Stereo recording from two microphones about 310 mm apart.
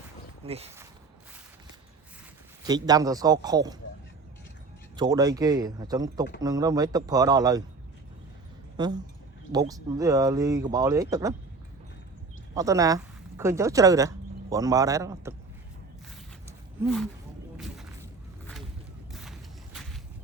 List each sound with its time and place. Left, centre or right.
0.4 s speech: centre
2.6 s speech: centre
4.9 s speech: centre
8.8 s speech: centre
12.5 s speech: centre
16.5 s roaring cats: centre
19.1 s a sound: centre